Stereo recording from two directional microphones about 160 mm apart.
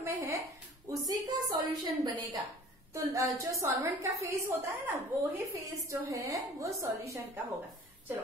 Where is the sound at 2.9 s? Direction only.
20° right (ahead or behind).